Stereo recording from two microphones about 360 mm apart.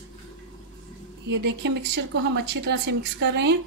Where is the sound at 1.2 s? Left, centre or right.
Right.